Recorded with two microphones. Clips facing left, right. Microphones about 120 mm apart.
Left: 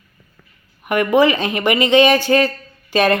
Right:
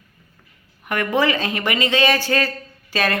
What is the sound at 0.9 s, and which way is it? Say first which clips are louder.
Speech: left 6 dB; 15° left (ahead or behind).